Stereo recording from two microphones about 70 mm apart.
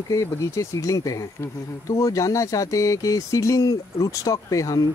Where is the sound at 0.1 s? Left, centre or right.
Left.